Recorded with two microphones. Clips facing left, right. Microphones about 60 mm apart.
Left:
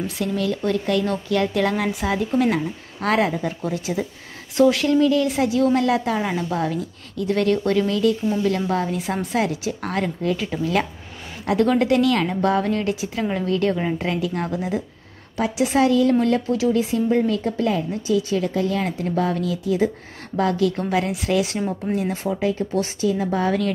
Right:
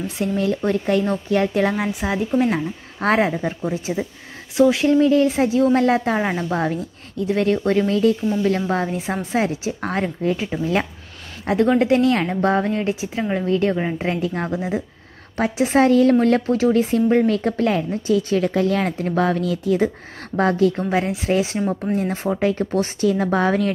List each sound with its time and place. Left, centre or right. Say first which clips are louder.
0.0 s speech: right 2 dB; right
3.0 s speech: right 2 dB; right; by 4.8 s centre
4.8 s a woman's voice: right 3 dB; right
7.2 s a woman's voice: right 1 dB; right
14.0 s speech: right 1 dB; right
15.3 s a woman's voice: right 2 dB; right
23.0 s speech: right 3 dB; right